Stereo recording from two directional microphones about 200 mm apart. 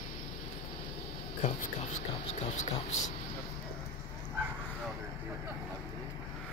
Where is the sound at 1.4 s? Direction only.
35° left (ahead or behind).